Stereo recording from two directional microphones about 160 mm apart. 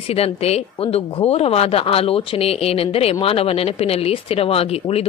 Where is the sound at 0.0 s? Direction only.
40° left (ahead or behind).